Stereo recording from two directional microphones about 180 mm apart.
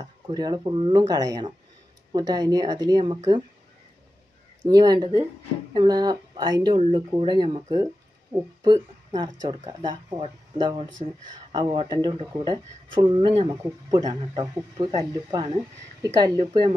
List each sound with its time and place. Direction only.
0.0 s speech: 20° right (ahead or behind)
4.6 s speech: 20° right (ahead or behind)